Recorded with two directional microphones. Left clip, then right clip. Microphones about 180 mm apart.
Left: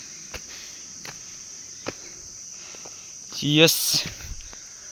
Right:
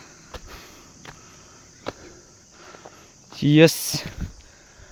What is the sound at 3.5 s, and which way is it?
Speech, 50° right (ahead or behind).